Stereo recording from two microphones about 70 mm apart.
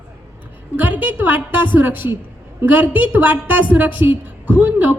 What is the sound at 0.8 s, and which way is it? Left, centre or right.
A woman's voice, right.